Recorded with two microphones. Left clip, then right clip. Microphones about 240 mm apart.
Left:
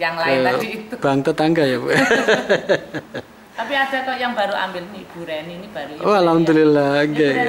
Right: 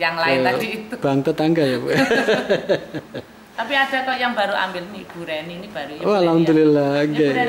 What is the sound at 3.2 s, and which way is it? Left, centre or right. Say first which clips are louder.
A woman's voice: right 2 dB; centre.